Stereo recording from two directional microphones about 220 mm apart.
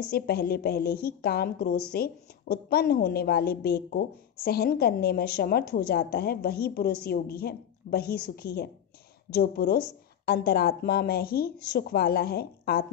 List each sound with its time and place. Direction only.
0.1 s a woman's voice: 45° left (ahead or behind)